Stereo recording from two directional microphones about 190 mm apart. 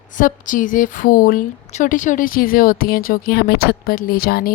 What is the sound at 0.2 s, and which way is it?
A woman's voice, 45° left (ahead or behind).